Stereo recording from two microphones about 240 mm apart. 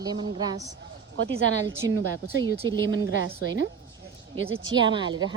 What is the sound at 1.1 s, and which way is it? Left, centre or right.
A woman's voice, right.